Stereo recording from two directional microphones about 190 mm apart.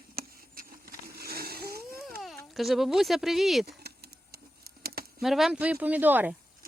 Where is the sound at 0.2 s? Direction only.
50° right (ahead or behind).